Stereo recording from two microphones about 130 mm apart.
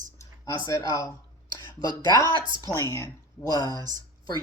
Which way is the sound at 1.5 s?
30° left (ahead or behind).